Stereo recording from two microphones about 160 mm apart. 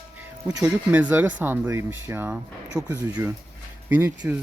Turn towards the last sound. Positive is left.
turn(degrees=-10)  # may be behind; listen again after turning